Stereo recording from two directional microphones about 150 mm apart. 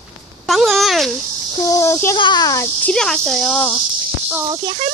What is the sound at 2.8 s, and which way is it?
Speech, 5° left (ahead or behind).